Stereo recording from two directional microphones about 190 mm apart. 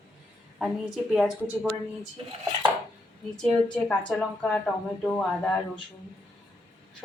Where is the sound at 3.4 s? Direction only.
5° left (ahead or behind).